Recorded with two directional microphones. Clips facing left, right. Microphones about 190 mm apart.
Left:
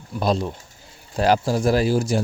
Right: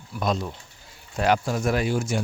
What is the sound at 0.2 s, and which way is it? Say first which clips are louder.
Speech: left 4 dB; 30° left (ahead or behind).